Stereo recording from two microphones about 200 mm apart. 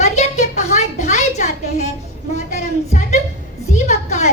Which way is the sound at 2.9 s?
35° left (ahead or behind).